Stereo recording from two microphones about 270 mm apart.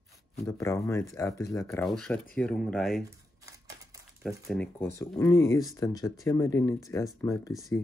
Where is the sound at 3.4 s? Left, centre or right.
Centre.